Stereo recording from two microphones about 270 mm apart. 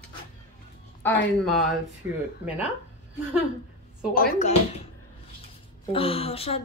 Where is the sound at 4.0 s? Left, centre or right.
Left.